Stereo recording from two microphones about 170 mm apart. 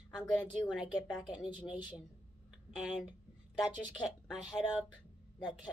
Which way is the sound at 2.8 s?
5° right (ahead or behind).